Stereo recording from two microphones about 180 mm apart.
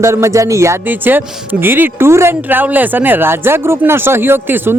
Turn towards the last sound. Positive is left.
turn(degrees=-10)  # may be behind; listen again after turning